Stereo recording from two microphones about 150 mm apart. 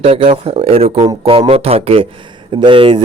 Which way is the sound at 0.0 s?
40° right (ahead or behind).